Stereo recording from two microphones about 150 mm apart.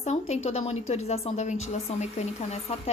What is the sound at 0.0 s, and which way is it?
A woman's voice, 45° left (ahead or behind).